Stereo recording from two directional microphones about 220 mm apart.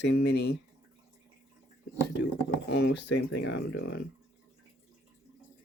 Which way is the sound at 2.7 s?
50° left (ahead or behind).